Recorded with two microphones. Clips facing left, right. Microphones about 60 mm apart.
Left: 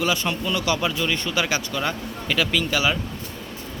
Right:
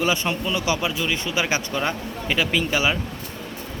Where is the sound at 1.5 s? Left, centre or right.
Right.